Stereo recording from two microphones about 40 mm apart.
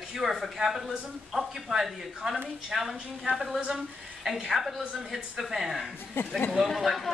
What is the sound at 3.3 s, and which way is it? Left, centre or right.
A man's voice, centre.